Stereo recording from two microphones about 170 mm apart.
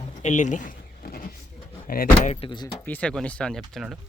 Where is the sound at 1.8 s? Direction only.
55° left (ahead or behind).